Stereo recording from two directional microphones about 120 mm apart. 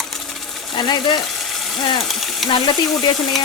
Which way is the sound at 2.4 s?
40° left (ahead or behind).